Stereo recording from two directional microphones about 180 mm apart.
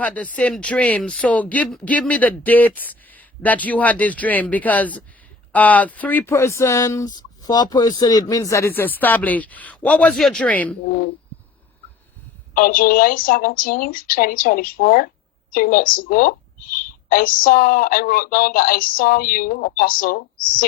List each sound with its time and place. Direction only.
0.0 s speech: 10° left (ahead or behind)
12.5 s speech: 50° left (ahead or behind)